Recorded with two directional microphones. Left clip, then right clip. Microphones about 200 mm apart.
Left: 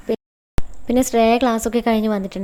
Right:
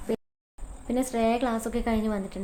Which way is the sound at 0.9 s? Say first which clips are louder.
Left 10 dB; 45° left (ahead or behind).